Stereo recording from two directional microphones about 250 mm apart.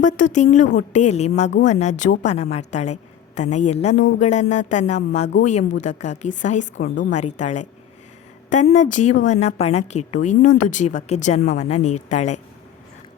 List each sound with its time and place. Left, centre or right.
0.0 s a woman's voice: left
6.7 s a woman's voice: left
7.3 s a woman's voice: left